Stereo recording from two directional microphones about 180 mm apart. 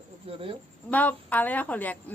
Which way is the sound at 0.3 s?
30° right (ahead or behind).